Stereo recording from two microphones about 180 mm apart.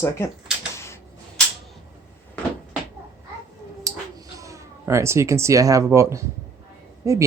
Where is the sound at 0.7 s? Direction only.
15° left (ahead or behind).